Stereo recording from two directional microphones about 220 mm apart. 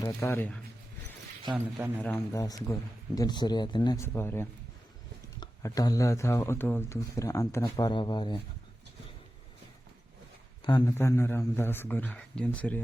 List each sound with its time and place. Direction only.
0.0 s speech: 10° left (ahead or behind)
1.5 s speech: 5° right (ahead or behind)
2.0 s speech: 10° left (ahead or behind)
10.6 s speech: 20° left (ahead or behind)